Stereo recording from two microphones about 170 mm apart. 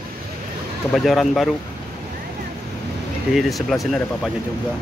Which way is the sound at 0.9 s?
Centre (ahead or behind).